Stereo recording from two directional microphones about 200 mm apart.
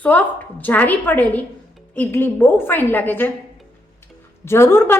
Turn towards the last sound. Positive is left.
turn(degrees=10)  # may be behind; listen again after turning